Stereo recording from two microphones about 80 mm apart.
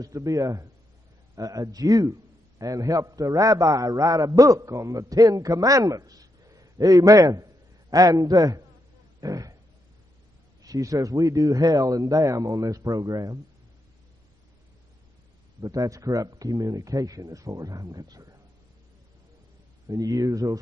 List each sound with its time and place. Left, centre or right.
0.0 s a man's voice: right
10.6 s a man's voice: right
15.6 s a man's voice: right
19.9 s a man's voice: right